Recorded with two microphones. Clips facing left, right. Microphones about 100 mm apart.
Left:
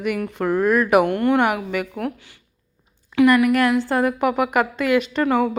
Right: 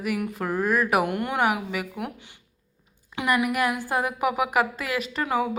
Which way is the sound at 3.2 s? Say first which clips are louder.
Left 8 dB; 15° right (ahead or behind).